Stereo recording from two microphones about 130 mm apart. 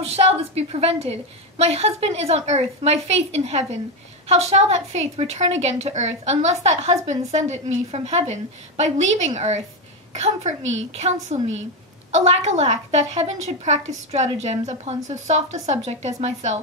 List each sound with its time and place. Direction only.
0.0 s a woman's voice: 50° right (ahead or behind)